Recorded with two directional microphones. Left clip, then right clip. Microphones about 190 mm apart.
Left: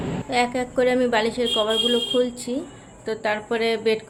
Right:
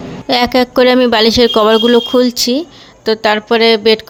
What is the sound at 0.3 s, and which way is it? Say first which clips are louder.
Speech: right 12 dB; 55° right (ahead or behind).